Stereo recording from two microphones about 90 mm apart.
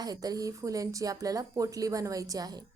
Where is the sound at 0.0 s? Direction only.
45° right (ahead or behind).